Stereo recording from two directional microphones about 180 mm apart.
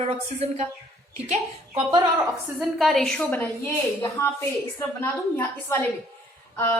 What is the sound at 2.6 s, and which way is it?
A woman's voice, centre (ahead or behind).